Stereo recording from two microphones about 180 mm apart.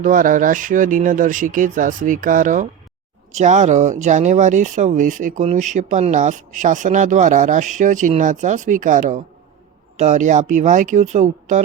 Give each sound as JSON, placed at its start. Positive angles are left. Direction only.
{"t": 0.0, "sound": "speech", "side_deg": -50}